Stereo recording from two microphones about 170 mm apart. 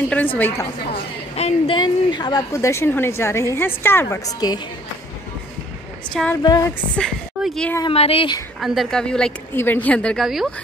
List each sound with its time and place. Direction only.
0.1 s a woman's voice: 10° left (ahead or behind)
1.3 s a woman's voice: 35° left (ahead or behind)
6.4 s a sound: 25° left (ahead or behind)
7.0 s a woman's voice: 5° left (ahead or behind)
7.9 s speech: 35° left (ahead or behind)
8.5 s speech: centre (ahead or behind)